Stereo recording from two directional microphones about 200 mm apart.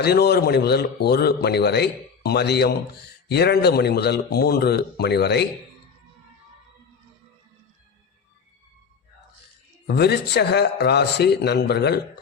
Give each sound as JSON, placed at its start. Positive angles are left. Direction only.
{"t": 0.0, "sound": "a man's voice", "side_deg": 55}
{"t": 9.8, "sound": "speech", "side_deg": 55}